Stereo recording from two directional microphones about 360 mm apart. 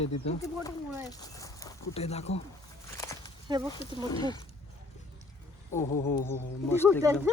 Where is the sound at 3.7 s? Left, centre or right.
Centre.